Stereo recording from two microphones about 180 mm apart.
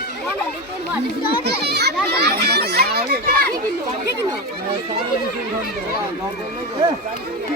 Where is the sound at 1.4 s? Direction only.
65° right (ahead or behind).